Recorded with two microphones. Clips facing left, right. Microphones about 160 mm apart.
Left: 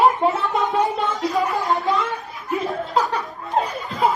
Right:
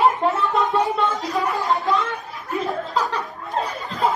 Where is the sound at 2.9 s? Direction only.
20° left (ahead or behind).